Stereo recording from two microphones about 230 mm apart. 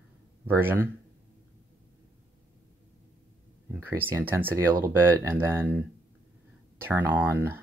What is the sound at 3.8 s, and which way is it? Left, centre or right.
Speech, centre.